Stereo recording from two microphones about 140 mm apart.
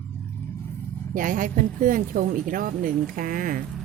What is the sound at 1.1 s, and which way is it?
A woman's voice, 70° right (ahead or behind).